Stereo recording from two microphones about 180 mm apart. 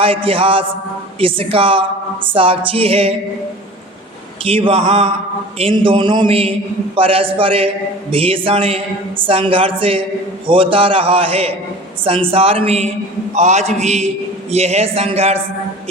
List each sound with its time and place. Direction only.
0.0 s a man's voice: 30° right (ahead or behind)
4.4 s a man's voice: 30° right (ahead or behind)